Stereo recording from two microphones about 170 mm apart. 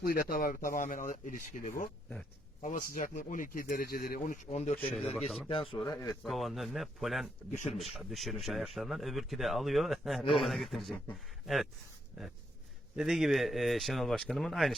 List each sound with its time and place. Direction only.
0.0 s speech: 60° left (ahead or behind)
4.4 s speech: 40° left (ahead or behind)
5.7 s speech: 20° left (ahead or behind)
6.2 s speech: centre (ahead or behind)
13.0 s speech: centre (ahead or behind)